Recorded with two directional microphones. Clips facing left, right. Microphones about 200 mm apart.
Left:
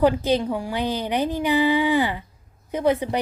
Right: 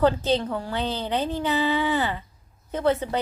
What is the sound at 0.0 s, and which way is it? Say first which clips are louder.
A woman's voice: left 2 dB; 15° left (ahead or behind).